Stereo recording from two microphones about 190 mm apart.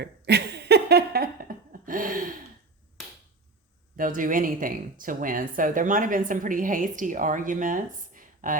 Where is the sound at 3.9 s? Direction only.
45° right (ahead or behind).